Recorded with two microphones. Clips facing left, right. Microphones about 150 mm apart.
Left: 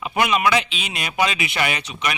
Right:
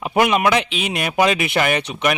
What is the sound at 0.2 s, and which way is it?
Speech, 50° right (ahead or behind).